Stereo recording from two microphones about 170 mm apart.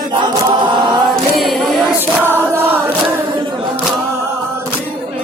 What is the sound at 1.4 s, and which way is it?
Choir, centre (ahead or behind).